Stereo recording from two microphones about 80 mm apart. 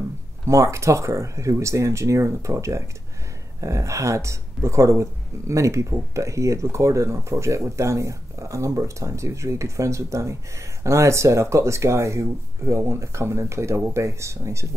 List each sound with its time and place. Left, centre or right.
0.5 s speech: right